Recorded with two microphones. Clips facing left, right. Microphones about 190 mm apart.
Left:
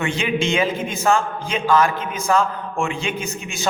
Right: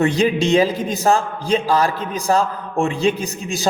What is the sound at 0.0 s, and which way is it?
A man's voice, 40° right (ahead or behind).